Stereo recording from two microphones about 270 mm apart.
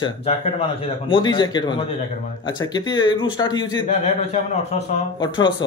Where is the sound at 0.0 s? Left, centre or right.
Left.